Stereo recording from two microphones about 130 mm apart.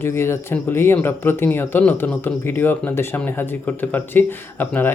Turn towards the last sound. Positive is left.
turn(degrees=15)  # may be behind; listen again after turning